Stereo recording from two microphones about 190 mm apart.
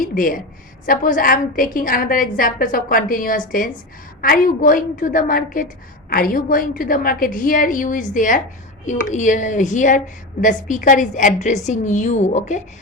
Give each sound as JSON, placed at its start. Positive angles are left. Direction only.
{"t": 0.0, "sound": "a woman's voice", "side_deg": 45}